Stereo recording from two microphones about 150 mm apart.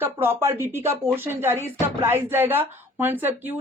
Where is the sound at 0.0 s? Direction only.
15° right (ahead or behind).